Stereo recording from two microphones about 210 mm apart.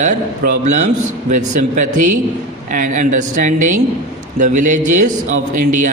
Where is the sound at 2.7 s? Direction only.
40° right (ahead or behind).